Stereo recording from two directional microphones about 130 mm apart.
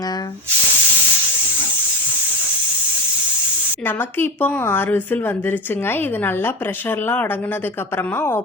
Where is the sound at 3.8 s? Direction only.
15° left (ahead or behind).